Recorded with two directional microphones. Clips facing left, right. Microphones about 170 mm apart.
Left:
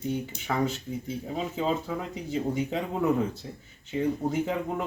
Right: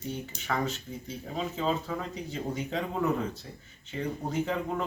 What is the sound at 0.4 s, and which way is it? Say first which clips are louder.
Speech: left 2 dB; 10° left (ahead or behind).